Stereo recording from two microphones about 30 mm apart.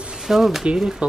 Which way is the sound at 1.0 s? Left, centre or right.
Right.